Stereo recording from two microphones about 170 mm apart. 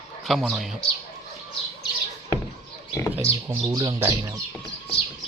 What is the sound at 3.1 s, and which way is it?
Speech, 15° right (ahead or behind).